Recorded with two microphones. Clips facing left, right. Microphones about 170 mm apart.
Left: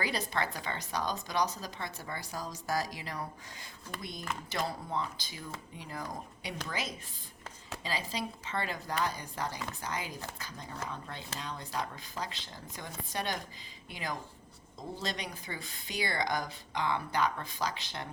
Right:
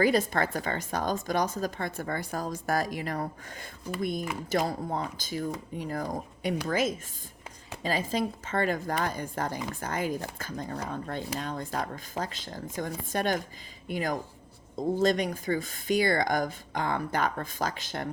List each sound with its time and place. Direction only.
0.0 s a woman's voice: 50° right (ahead or behind)